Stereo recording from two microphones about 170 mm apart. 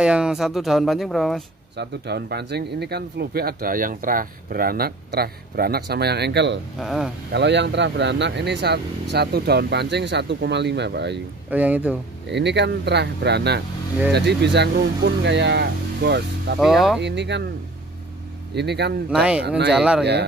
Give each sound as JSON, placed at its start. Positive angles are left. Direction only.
{"t": 0.0, "sound": "speech", "side_deg": -5}
{"t": 1.8, "sound": "speech", "side_deg": -75}
{"t": 6.8, "sound": "speech", "side_deg": 0}
{"t": 7.3, "sound": "speech", "side_deg": -90}
{"t": 11.5, "sound": "speech", "side_deg": -10}
{"t": 12.3, "sound": "speech", "side_deg": -90}
{"t": 16.5, "sound": "speech", "side_deg": 0}
{"t": 17.0, "sound": "speech", "side_deg": -90}
{"t": 18.5, "sound": "speech", "side_deg": -80}
{"t": 19.0, "sound": "speech", "side_deg": -5}